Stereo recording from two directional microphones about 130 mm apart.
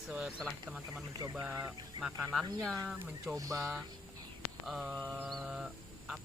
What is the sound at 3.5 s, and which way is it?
Speech, centre (ahead or behind).